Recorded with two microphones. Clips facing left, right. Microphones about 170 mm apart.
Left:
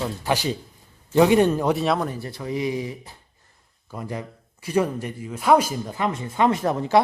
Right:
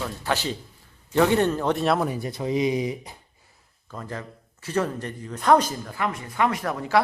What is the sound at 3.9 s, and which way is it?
Speech, 10° left (ahead or behind).